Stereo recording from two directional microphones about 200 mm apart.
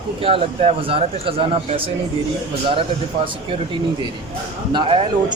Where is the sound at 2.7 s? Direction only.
25° right (ahead or behind).